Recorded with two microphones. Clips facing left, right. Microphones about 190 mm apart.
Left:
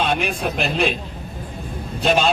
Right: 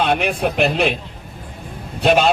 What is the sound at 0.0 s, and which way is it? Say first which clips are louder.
Speech: right 3 dB; 60° right (ahead or behind).